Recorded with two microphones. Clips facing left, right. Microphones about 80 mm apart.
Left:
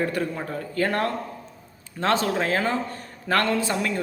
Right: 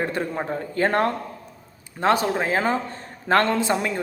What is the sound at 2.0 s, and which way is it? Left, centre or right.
Speech, centre.